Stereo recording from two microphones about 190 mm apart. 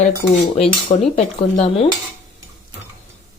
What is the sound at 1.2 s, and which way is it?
Speech, 35° left (ahead or behind).